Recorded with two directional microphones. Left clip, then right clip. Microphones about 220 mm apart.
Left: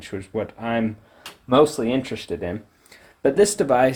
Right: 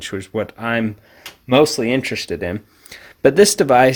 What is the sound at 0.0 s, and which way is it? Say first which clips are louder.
Speech: right 5 dB; 30° right (ahead or behind).